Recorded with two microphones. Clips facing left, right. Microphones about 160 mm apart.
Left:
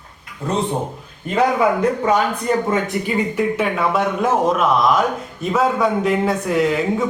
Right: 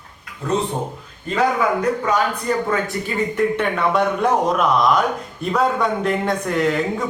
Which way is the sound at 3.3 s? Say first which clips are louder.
Even; 5° left (ahead or behind).